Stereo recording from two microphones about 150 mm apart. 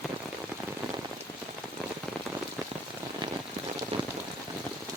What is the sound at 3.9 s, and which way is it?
Rain, 40° right (ahead or behind).